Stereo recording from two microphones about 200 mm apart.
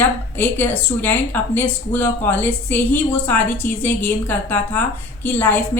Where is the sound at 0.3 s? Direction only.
10° left (ahead or behind).